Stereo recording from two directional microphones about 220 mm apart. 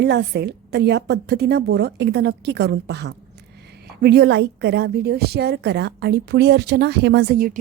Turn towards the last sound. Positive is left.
turn(degrees=-40)  # may be behind; listen again after turning